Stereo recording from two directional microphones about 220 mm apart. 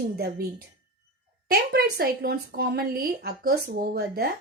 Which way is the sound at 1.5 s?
45° right (ahead or behind).